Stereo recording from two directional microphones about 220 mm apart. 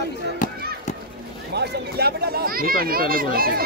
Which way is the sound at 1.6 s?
45° right (ahead or behind).